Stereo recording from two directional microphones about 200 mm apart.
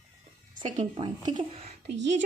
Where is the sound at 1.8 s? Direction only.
60° right (ahead or behind).